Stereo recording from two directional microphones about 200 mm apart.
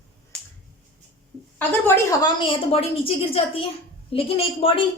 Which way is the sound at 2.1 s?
20° left (ahead or behind).